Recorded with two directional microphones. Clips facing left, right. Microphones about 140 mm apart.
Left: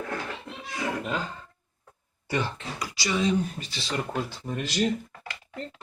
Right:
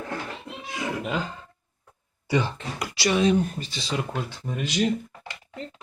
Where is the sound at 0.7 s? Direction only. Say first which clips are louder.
Right 1 dB; 5° right (ahead or behind).